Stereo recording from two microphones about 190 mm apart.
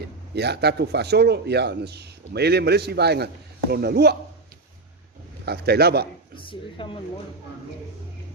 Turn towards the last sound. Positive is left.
turn(degrees=25)  # may be behind; listen again after turning